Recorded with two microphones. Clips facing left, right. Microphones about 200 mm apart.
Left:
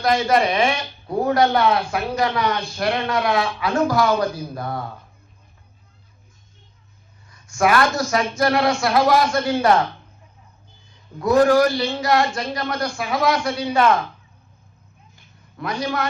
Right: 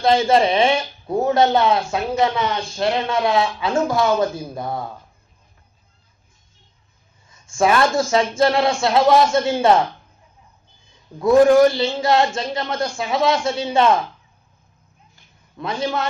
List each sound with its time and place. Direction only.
0.0 s speech: 25° right (ahead or behind)
7.3 s speech: 25° right (ahead or behind)
11.2 s speech: 25° right (ahead or behind)
15.5 s speech: 25° right (ahead or behind)